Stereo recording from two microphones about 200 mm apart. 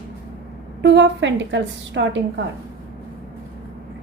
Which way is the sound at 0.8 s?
60° right (ahead or behind).